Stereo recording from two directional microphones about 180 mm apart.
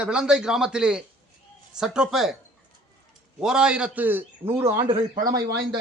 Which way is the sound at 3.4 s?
5° right (ahead or behind).